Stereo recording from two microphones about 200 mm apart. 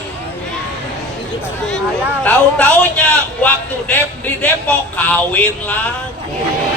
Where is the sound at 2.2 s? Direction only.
10° left (ahead or behind).